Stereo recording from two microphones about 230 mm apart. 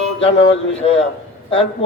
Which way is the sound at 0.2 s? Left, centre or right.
Left.